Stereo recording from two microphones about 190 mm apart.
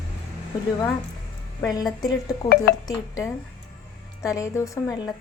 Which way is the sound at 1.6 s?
20° left (ahead or behind).